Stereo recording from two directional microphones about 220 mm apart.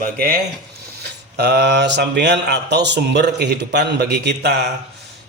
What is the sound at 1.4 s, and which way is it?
Speech, 50° right (ahead or behind).